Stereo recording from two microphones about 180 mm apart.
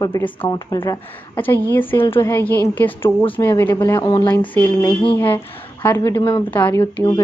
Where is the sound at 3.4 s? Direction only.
10° left (ahead or behind).